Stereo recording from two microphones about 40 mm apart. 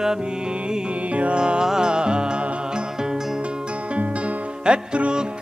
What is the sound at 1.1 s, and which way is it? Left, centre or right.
Music, right.